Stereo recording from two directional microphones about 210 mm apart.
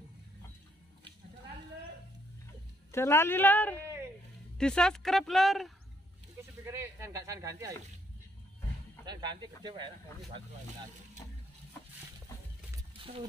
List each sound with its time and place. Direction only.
2.9 s speech: 10° left (ahead or behind)
6.6 s speech: 10° right (ahead or behind)
9.0 s speech: 20° right (ahead or behind)
13.0 s a sound: 25° right (ahead or behind)